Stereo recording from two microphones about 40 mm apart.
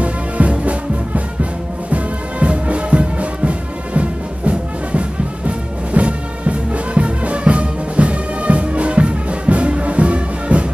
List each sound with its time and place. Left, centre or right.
0.0 s music: right